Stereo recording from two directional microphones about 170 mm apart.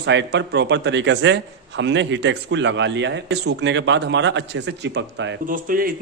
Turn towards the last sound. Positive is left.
turn(degrees=-55)  # may be behind; listen again after turning